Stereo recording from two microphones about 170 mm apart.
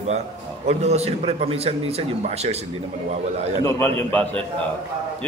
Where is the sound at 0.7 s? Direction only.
40° right (ahead or behind).